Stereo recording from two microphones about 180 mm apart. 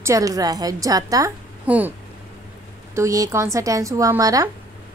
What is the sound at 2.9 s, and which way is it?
A woman's voice, 15° right (ahead or behind).